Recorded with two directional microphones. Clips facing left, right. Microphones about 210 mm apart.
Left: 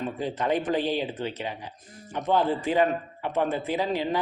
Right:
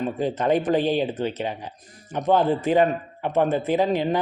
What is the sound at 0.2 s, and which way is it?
A man's voice, 45° right (ahead or behind).